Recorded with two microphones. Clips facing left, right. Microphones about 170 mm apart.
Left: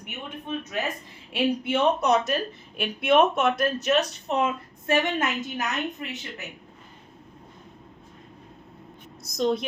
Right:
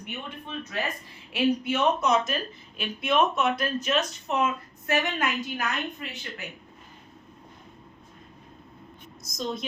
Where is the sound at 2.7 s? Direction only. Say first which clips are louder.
Left 4 dB; 55° left (ahead or behind); by 4.5 s 35° left (ahead or behind).